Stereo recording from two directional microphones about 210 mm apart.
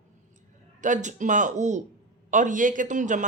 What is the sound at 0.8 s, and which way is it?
Speech, 35° right (ahead or behind).